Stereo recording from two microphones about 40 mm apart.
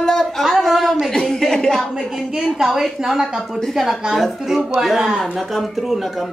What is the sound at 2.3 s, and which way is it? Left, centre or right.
Speech, centre.